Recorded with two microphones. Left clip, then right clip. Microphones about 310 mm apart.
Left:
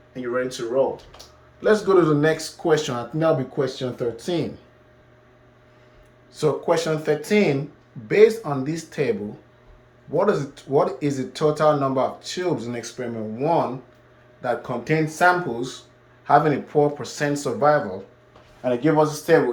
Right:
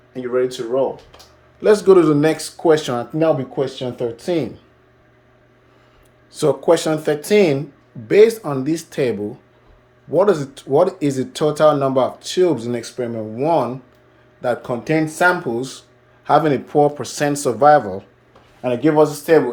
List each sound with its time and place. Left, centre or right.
0.1 s speech: right
1.6 s speech: right
2.6 s speech: centre
6.3 s speech: right
10.2 s speech: right